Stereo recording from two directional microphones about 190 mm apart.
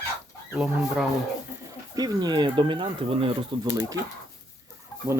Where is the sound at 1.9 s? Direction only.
20° right (ahead or behind).